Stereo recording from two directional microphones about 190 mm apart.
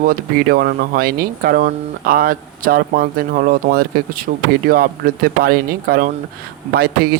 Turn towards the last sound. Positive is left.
turn(degrees=-50)  # may be behind; listen again after turning